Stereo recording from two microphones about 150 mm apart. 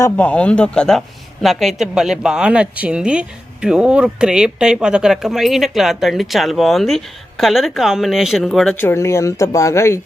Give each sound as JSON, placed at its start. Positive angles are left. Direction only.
{"t": 0.0, "sound": "speech", "side_deg": 10}
{"t": 8.7, "sound": "speech", "side_deg": 15}